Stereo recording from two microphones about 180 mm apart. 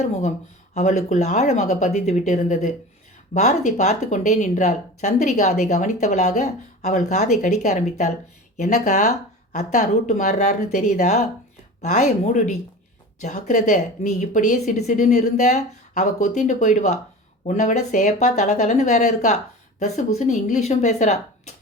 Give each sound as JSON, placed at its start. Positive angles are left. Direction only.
{"t": 0.0, "sound": "speech", "side_deg": 40}